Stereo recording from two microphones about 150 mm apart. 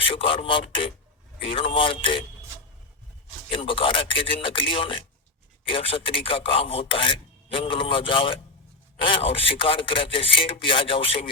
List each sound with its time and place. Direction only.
0.0 s filing: 35° left (ahead or behind)
3.5 s filing: 35° left (ahead or behind)